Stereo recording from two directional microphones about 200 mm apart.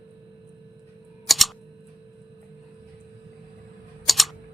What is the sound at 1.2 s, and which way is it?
Camera, centre (ahead or behind).